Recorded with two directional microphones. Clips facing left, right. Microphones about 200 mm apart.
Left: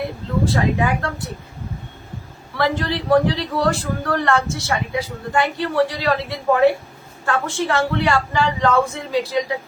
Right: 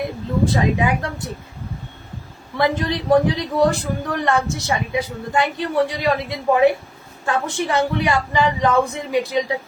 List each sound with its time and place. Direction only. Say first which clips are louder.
0.4 s speech: right 1 dB; 20° right (ahead or behind)
2.6 s speech: right 1 dB; 20° right (ahead or behind)